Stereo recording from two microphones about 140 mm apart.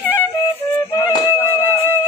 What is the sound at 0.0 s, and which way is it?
Music, 15° left (ahead or behind).